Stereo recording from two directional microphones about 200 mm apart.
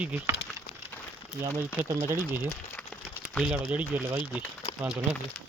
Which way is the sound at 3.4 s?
Centre (ahead or behind).